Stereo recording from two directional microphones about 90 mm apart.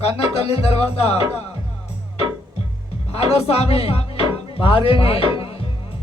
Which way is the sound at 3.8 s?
90° left.